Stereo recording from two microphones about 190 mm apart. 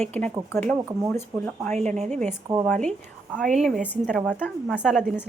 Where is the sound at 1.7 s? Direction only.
35° right (ahead or behind).